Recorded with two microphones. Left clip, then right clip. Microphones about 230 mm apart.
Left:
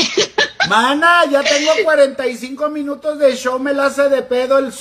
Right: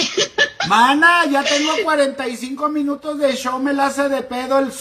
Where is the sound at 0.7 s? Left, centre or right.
Centre.